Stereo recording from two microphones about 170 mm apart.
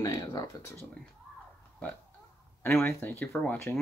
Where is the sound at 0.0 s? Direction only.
20° left (ahead or behind).